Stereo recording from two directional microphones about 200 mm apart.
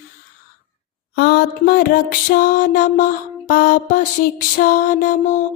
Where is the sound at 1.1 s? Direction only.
55° left (ahead or behind).